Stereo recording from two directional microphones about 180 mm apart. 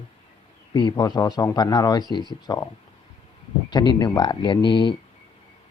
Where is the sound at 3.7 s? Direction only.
25° left (ahead or behind).